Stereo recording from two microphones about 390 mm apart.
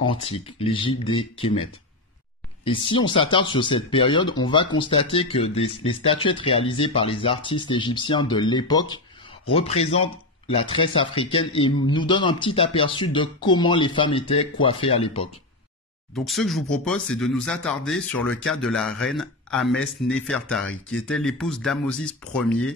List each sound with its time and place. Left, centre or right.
0.0 s speech: centre
2.6 s speech: centre
16.3 s speech: centre